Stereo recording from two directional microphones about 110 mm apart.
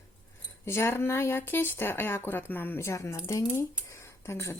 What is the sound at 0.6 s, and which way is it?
A woman's voice, 25° left (ahead or behind).